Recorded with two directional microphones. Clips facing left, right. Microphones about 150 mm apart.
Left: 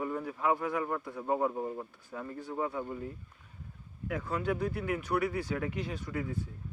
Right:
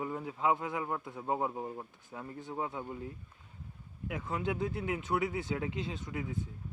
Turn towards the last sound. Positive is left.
turn(degrees=-20)  # may be behind; listen again after turning